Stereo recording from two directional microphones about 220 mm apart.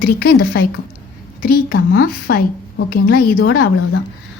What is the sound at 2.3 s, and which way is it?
Speech, 45° left (ahead or behind).